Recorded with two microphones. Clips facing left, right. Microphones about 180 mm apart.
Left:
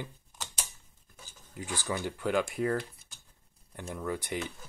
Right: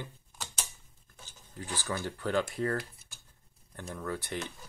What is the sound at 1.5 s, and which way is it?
Speech, 15° left (ahead or behind).